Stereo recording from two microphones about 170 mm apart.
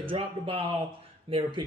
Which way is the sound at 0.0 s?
30° right (ahead or behind).